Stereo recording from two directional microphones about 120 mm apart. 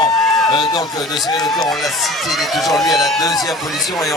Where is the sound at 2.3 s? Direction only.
Centre (ahead or behind).